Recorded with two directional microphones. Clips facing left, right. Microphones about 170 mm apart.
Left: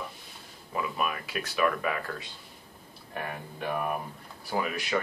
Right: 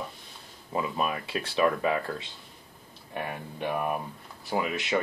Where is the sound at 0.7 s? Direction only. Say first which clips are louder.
Right 2 dB; 30° right (ahead or behind).